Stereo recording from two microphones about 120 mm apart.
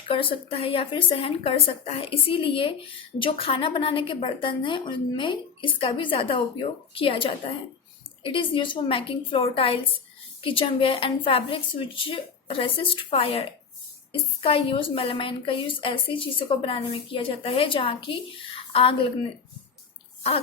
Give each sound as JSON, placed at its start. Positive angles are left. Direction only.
{"t": 0.1, "sound": "a woman's voice", "side_deg": 50}